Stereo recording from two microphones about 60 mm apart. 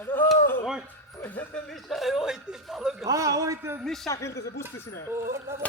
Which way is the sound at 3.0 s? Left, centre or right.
Right.